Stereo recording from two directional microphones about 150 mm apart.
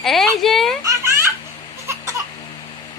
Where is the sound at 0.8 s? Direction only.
20° right (ahead or behind).